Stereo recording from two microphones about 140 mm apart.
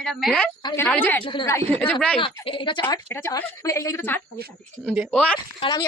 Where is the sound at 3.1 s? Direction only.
20° left (ahead or behind).